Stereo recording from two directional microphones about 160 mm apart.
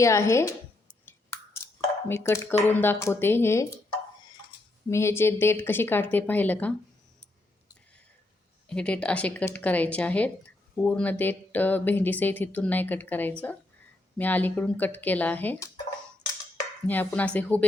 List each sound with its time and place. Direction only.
0.0 s a woman's voice: 20° left (ahead or behind)
1.0 s chewing: 15° left (ahead or behind)
2.0 s speech: 15° left (ahead or behind)
4.9 s speech: 15° left (ahead or behind)
8.6 s speech: 5° left (ahead or behind)
16.8 s speech: 10° left (ahead or behind)